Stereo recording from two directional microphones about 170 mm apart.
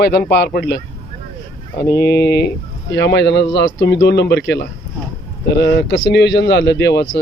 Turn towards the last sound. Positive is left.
turn(degrees=80)